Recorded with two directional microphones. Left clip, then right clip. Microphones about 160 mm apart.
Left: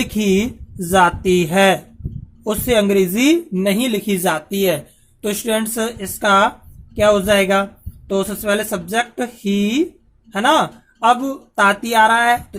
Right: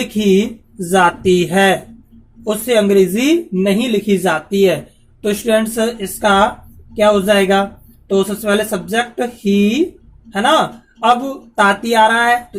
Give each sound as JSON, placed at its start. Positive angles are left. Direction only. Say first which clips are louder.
{"t": 0.0, "sound": "speech", "louder": "right 4 dB", "side_deg": 50}